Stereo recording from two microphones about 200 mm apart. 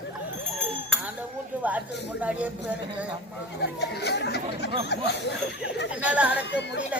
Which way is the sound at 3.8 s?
55° left (ahead or behind).